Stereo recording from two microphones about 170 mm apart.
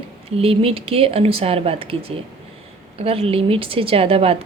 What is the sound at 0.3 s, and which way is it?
A woman's voice, 35° right (ahead or behind).